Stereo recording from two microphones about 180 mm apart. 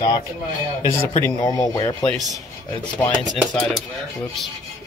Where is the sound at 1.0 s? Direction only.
15° left (ahead or behind).